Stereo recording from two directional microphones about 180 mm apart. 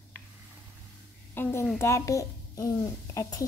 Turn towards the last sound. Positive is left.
turn(degrees=20)  # may be behind; listen again after turning